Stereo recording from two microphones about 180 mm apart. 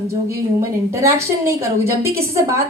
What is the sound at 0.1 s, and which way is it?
A woman's voice, 15° right (ahead or behind).